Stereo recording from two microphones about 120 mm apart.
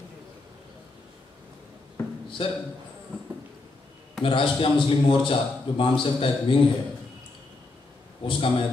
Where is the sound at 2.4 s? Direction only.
50° left (ahead or behind).